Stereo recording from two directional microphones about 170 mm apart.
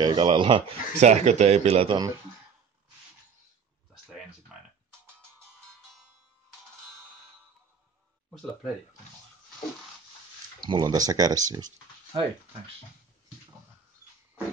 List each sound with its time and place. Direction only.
0.0 s speech: 25° right (ahead or behind)
10.6 s speech: 25° right (ahead or behind)